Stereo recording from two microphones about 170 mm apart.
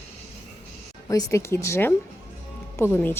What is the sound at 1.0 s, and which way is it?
Speech, 20° left (ahead or behind).